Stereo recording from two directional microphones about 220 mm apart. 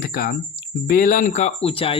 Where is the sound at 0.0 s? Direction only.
40° left (ahead or behind).